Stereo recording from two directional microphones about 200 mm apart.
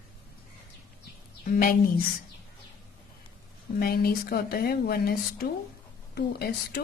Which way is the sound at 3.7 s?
50° left (ahead or behind).